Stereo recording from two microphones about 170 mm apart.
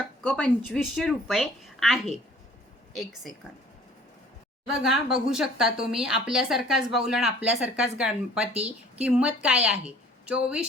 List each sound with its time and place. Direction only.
0.2 s a woman's voice: 10° left (ahead or behind)
4.8 s a woman's voice: 5° right (ahead or behind)
8.5 s speech: 40° right (ahead or behind)
9.0 s a woman's voice: 5° right (ahead or behind)